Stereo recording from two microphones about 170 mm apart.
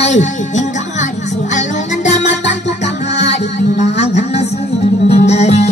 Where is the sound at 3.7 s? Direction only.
40° left (ahead or behind).